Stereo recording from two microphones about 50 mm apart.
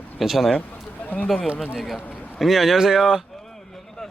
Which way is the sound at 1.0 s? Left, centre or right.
Left.